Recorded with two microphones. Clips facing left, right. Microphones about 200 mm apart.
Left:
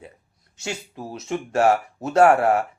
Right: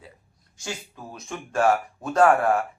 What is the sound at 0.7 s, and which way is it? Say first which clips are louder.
Speech: left 4 dB; 25° left (ahead or behind).